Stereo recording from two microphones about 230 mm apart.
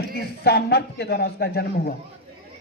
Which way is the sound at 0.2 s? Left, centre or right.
Left.